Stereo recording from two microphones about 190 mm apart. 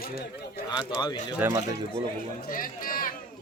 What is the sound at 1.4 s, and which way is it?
Speech, 10° right (ahead or behind).